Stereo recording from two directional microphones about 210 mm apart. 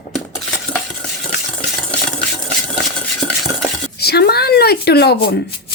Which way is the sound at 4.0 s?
50° left (ahead or behind).